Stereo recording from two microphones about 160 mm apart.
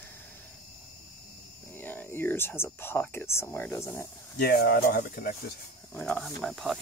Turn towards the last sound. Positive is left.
turn(degrees=0)  # may be behind; listen again after turning